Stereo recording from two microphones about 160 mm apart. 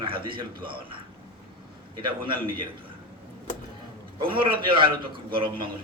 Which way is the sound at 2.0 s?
30° right (ahead or behind).